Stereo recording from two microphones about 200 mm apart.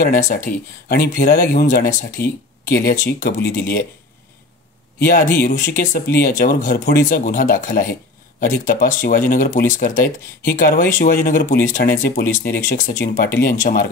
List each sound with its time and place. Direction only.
0.0 s speech: 45° left (ahead or behind)
5.0 s speech: 50° left (ahead or behind)